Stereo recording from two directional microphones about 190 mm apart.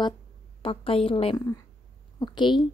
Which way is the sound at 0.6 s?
30° left (ahead or behind).